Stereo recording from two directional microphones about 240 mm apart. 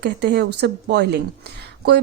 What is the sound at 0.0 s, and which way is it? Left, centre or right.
Speech, right.